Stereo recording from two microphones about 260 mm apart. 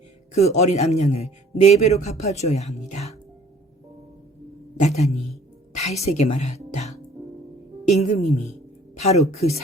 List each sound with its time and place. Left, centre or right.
0.3 s music: left
4.8 s a woman's voice: left
7.9 s music: left
9.0 s a woman's voice: left
9.3 s music: left